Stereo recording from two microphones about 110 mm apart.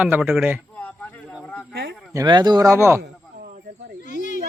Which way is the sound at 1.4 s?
15° left (ahead or behind).